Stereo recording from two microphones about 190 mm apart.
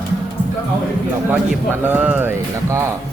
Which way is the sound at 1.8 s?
10° right (ahead or behind).